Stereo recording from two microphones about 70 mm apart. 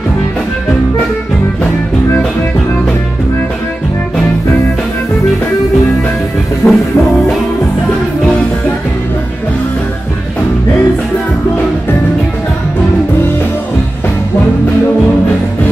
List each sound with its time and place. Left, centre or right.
6.6 s music: left